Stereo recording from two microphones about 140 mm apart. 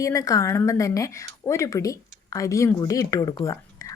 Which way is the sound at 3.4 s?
25° left (ahead or behind).